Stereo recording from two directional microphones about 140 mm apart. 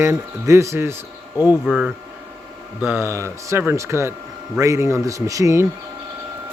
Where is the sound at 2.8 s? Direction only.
15° right (ahead or behind).